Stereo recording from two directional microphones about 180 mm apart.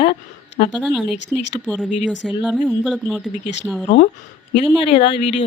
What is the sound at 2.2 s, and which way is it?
Speech, centre (ahead or behind).